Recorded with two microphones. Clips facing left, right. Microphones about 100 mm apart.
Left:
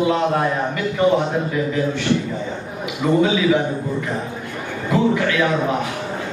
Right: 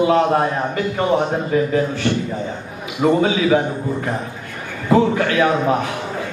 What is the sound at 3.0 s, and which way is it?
A man's voice, 45° right (ahead or behind).